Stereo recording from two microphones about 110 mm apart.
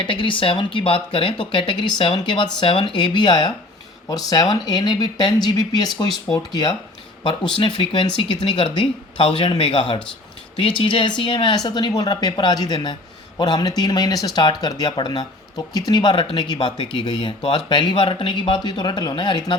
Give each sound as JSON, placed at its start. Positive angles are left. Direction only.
{"t": 0.0, "sound": "speech", "side_deg": 50}
{"t": 7.5, "sound": "speech", "side_deg": 50}